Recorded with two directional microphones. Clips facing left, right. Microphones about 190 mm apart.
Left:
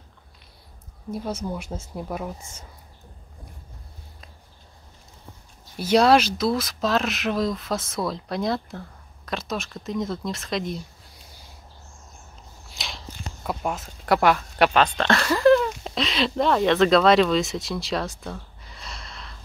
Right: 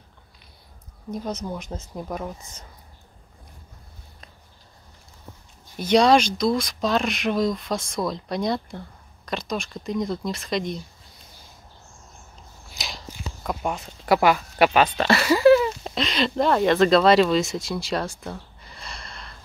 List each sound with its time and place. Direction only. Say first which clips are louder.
1.1 s speech: even; 5° left (ahead or behind)
5.8 s speech: even; 5° left (ahead or behind)
12.7 s speech: right 1 dB; centre (ahead or behind)